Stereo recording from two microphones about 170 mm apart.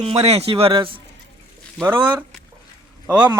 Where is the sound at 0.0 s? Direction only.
35° right (ahead or behind).